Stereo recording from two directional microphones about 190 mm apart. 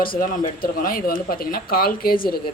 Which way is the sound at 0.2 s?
45° left (ahead or behind).